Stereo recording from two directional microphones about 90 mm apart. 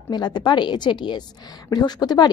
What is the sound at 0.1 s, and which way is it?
A woman's voice, 55° left (ahead or behind).